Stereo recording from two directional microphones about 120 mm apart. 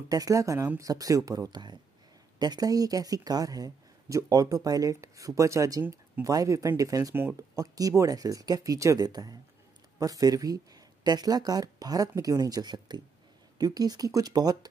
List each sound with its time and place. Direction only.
0.1 s speech: 30° right (ahead or behind)
7.2 s speech: 20° right (ahead or behind)
7.6 s speech: 30° right (ahead or behind)